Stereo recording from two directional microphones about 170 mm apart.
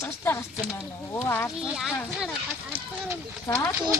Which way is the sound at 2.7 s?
30° right (ahead or behind).